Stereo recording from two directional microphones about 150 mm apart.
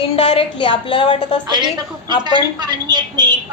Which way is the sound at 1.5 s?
30° right (ahead or behind).